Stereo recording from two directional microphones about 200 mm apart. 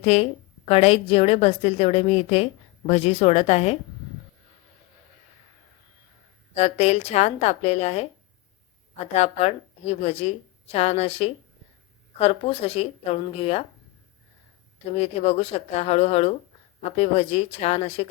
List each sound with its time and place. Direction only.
0.0 s a woman's voice: 30° left (ahead or behind)
6.6 s a woman's voice: 30° left (ahead or behind)
9.1 s a woman's voice: 35° left (ahead or behind)
14.9 s a woman's voice: 30° left (ahead or behind)